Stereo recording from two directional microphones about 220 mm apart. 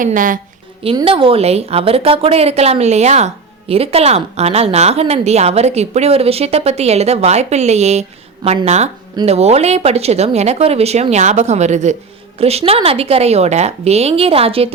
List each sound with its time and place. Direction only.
0.0 s a woman's voice: 35° right (ahead or behind)
0.8 s speech: 25° right (ahead or behind)